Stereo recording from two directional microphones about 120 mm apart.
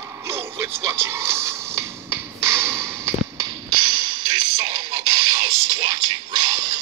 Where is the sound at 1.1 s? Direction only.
20° right (ahead or behind).